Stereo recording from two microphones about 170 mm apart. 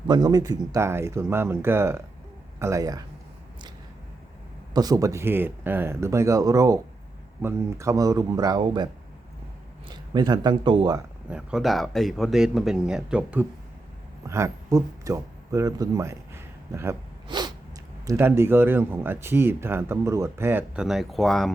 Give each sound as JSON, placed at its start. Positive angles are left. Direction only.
{"t": 0.1, "sound": "speech", "side_deg": -25}
{"t": 4.7, "sound": "speech", "side_deg": -20}
{"t": 9.9, "sound": "speech", "side_deg": -25}
{"t": 11.3, "sound": "speech", "side_deg": -5}
{"t": 17.2, "sound": "sneeze", "side_deg": -25}
{"t": 18.0, "sound": "speech", "side_deg": -15}
{"t": 20.8, "sound": "speech", "side_deg": 0}